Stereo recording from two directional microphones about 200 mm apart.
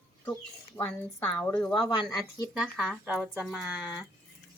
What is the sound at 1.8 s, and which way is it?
Speech, 20° left (ahead or behind).